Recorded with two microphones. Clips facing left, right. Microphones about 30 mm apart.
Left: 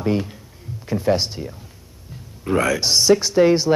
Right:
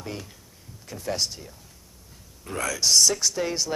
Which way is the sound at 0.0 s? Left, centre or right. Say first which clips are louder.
Left 15 dB; left.